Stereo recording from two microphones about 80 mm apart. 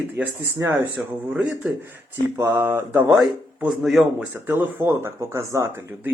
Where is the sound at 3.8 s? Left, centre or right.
Centre.